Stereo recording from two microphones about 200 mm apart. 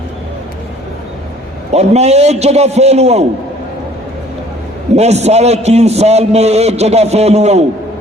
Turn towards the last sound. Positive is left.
turn(degrees=-30)  # may be behind; listen again after turning